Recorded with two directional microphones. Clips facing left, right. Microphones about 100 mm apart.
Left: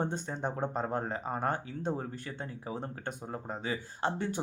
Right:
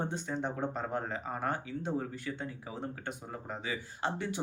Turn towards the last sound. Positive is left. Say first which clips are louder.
# left 2 dB
turn(degrees=40)  # may be behind; listen again after turning